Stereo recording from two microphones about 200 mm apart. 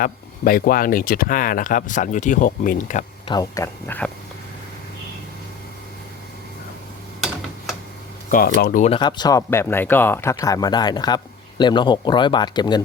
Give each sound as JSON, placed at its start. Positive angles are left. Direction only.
{"t": 0.0, "sound": "speech", "side_deg": 45}
{"t": 3.2, "sound": "speech", "side_deg": 20}
{"t": 8.3, "sound": "speech", "side_deg": 45}
{"t": 8.9, "sound": "speech", "side_deg": 20}